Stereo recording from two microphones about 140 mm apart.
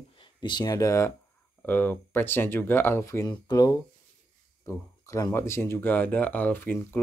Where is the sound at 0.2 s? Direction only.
30° left (ahead or behind).